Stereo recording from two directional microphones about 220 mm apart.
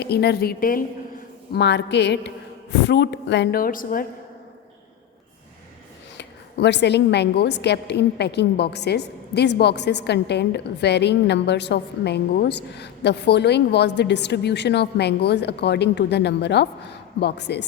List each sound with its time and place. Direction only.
0.0 s a woman's voice: 50° left (ahead or behind)
6.1 s a woman's voice: 50° left (ahead or behind)